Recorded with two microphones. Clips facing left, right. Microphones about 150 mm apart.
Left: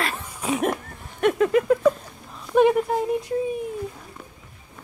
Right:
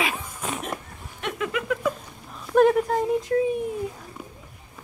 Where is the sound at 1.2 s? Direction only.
40° left (ahead or behind).